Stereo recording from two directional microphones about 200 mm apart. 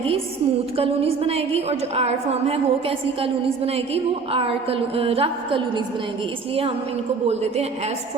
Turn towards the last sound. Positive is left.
turn(degrees=-30)  # may be behind; listen again after turning